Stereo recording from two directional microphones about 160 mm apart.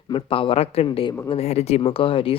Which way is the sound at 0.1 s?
35° left (ahead or behind).